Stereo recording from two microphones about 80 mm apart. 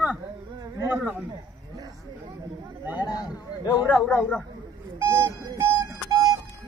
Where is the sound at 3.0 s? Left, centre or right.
Left.